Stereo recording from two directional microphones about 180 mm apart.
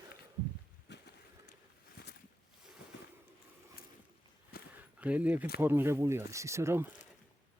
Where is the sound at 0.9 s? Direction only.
70° left (ahead or behind).